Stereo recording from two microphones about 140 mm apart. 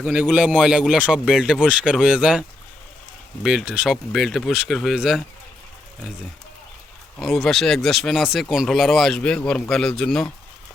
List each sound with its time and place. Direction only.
0.0 s speech: 10° right (ahead or behind)
3.4 s speech: 5° right (ahead or behind)
7.2 s speech: centre (ahead or behind)